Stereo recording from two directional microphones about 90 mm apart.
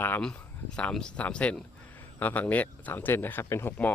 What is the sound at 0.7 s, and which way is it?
Speech, 10° left (ahead or behind).